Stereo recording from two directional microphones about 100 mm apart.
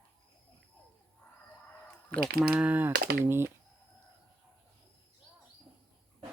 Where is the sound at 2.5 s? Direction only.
15° right (ahead or behind).